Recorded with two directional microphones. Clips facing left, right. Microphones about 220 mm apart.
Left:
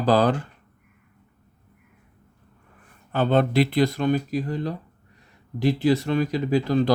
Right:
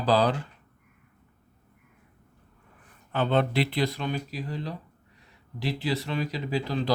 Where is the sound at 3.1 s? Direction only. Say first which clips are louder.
Left 5 dB; 40° left (ahead or behind).